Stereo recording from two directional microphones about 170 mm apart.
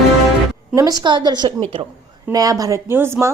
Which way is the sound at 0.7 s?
20° right (ahead or behind).